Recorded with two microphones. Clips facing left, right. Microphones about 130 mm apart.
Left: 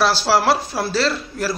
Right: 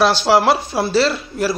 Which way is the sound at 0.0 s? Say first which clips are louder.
Right 3 dB; centre (ahead or behind).